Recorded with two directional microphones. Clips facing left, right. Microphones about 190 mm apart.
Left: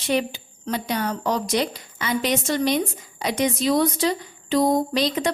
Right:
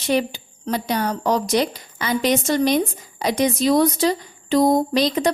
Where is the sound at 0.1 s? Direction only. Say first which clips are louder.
Right 2 dB; 40° right (ahead or behind).